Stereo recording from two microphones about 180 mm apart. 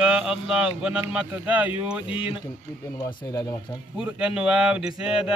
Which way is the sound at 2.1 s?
30° left (ahead or behind).